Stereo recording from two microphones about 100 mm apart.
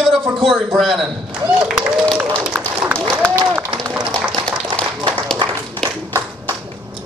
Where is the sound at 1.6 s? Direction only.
10° right (ahead or behind).